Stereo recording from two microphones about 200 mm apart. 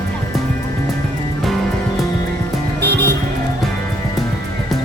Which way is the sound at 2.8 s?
55° right (ahead or behind).